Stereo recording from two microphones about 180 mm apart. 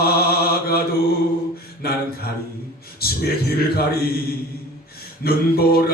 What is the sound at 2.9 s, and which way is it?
Mantra, 60° left (ahead or behind).